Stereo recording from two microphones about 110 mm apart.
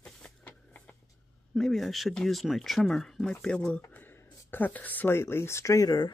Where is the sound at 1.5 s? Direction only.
5° left (ahead or behind).